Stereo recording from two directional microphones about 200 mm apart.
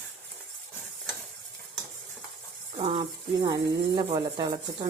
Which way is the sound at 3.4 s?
20° right (ahead or behind).